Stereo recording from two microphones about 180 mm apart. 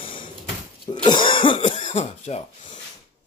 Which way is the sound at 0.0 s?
30° left (ahead or behind).